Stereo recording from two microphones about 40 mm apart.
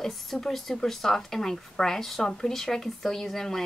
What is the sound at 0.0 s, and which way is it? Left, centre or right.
Speech, centre.